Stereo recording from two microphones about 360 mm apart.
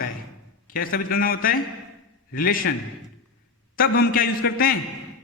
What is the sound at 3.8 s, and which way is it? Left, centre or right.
A man's voice, left.